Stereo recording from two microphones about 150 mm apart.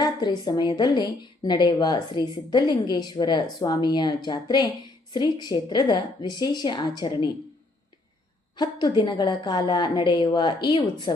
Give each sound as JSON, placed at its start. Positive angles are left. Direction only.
{"t": 0.0, "sound": "a woman's voice", "side_deg": 30}
{"t": 8.5, "sound": "a woman's voice", "side_deg": 30}